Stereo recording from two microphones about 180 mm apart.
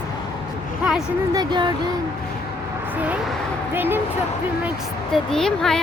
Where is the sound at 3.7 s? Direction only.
10° right (ahead or behind).